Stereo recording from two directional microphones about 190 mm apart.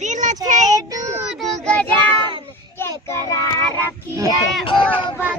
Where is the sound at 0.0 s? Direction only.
40° right (ahead or behind).